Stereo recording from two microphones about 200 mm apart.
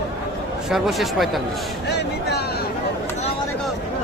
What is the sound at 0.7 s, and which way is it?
Speech, centre (ahead or behind).